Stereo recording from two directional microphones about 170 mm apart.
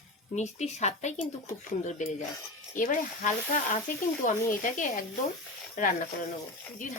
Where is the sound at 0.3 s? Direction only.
40° left (ahead or behind).